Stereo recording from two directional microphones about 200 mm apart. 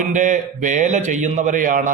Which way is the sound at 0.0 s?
40° right (ahead or behind).